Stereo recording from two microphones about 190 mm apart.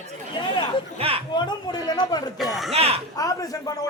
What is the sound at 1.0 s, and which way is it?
Speech, 30° right (ahead or behind).